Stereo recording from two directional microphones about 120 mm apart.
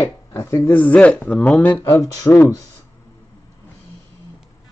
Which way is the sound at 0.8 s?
10° left (ahead or behind).